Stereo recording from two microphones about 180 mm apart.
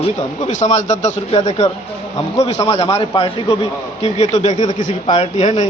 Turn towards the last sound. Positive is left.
turn(degrees=40)  # may be behind; listen again after turning